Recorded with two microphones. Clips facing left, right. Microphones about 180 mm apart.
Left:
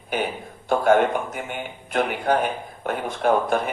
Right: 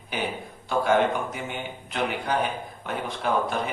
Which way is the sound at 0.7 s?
50° left (ahead or behind).